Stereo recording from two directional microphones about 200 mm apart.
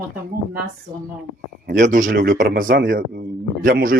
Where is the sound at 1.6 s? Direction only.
40° right (ahead or behind).